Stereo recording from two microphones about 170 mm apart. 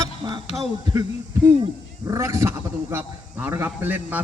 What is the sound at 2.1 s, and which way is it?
A man's voice, 20° right (ahead or behind).